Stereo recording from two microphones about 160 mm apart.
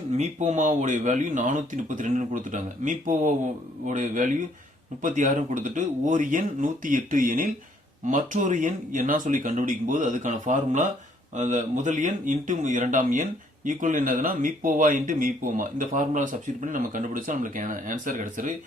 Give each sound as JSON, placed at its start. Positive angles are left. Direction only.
{"t": 0.1, "sound": "speech", "side_deg": -45}